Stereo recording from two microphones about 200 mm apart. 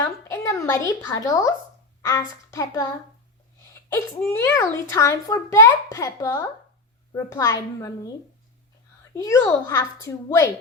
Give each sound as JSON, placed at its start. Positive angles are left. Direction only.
{"t": 0.0, "sound": "a sound", "side_deg": 15}
{"t": 2.0, "sound": "a child's voice", "side_deg": 15}
{"t": 4.3, "sound": "a child's voice", "side_deg": 10}
{"t": 9.1, "sound": "a child's voice", "side_deg": 15}